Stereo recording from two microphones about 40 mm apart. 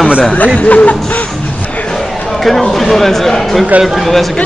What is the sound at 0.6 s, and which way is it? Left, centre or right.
Speech, left.